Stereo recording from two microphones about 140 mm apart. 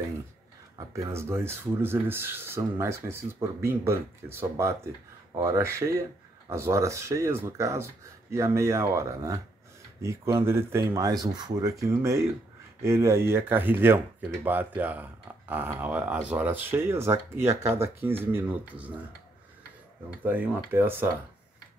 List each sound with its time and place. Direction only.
0.7 s speech: 20° right (ahead or behind)
20.2 s speech: 15° right (ahead or behind)